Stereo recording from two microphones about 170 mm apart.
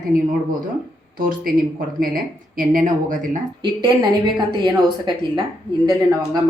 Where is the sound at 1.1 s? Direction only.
55° right (ahead or behind).